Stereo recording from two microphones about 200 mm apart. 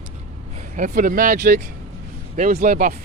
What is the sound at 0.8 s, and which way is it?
Speech, 40° right (ahead or behind).